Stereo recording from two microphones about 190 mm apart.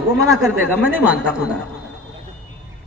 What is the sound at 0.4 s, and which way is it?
Speech, 10° right (ahead or behind).